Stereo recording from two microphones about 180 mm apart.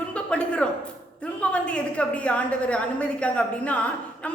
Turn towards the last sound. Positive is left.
turn(degrees=5)  # may be behind; listen again after turning